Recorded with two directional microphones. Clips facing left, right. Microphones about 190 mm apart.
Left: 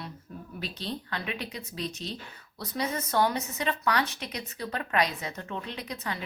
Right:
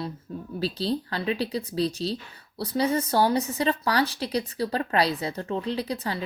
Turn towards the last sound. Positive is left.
turn(degrees=-30)  # may be behind; listen again after turning